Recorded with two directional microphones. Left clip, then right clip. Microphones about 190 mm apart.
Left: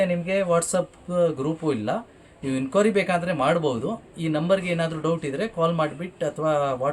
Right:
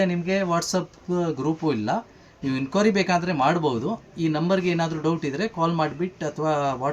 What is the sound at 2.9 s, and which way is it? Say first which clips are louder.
Speech: even; 25° left (ahead or behind).